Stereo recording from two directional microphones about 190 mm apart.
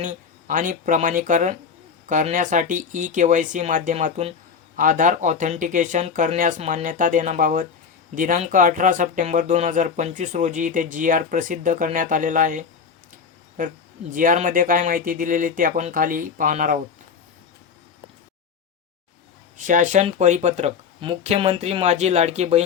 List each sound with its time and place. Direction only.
0.0 s speech: 45° right (ahead or behind)
4.8 s speech: 45° right (ahead or behind)
19.5 s speech: 45° right (ahead or behind)